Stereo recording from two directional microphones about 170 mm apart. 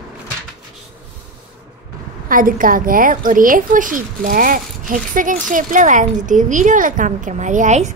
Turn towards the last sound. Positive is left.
turn(degrees=-45)  # may be behind; listen again after turning